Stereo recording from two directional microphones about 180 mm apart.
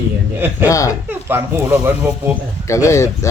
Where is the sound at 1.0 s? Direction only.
10° right (ahead or behind).